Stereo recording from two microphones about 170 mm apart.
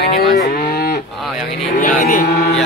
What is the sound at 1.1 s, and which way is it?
Speech, centre (ahead or behind).